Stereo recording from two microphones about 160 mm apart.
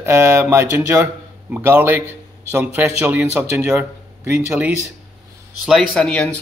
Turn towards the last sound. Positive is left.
turn(degrees=5)  # may be behind; listen again after turning